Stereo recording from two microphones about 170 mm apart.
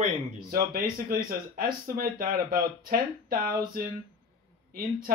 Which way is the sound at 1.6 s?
60° right (ahead or behind).